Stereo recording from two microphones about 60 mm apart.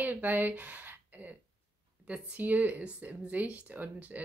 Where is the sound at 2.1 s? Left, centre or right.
Right.